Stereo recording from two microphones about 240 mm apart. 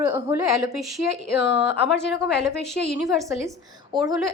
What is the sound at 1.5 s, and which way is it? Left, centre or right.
Speech, left.